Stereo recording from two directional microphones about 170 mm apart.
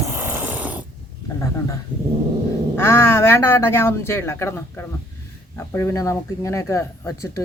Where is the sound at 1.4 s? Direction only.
20° left (ahead or behind).